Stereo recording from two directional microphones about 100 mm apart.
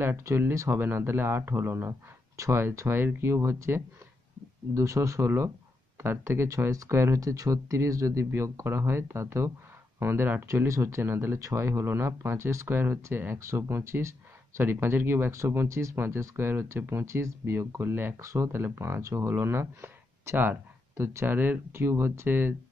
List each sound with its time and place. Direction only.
0.0 s speech: 25° right (ahead or behind)